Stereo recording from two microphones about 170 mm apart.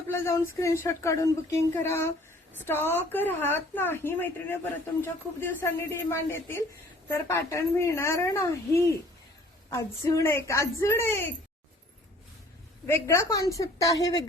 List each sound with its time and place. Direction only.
0.1 s speech: 15° left (ahead or behind)
12.9 s a woman's voice: 15° left (ahead or behind)